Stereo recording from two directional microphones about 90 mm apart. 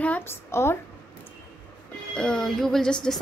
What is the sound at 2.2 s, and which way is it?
Speech, 10° left (ahead or behind).